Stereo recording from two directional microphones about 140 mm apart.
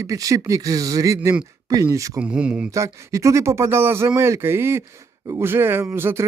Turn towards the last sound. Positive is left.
turn(degrees=-15)  # may be behind; listen again after turning